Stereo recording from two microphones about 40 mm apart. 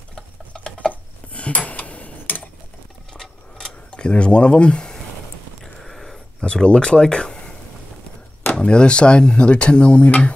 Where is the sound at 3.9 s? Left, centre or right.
Left.